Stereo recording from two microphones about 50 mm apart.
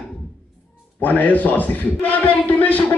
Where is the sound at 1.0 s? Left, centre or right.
Left.